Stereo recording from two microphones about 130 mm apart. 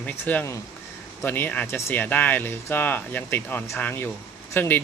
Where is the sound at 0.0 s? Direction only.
10° left (ahead or behind).